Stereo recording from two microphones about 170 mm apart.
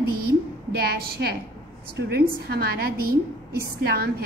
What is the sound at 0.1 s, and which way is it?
A woman's voice, 65° right (ahead or behind).